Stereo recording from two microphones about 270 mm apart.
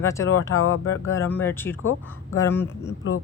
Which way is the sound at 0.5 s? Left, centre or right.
Left.